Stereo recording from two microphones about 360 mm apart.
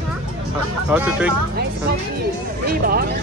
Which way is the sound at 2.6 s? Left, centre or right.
Right.